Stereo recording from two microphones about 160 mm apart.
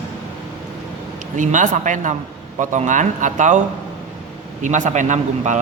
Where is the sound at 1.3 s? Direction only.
50° right (ahead or behind).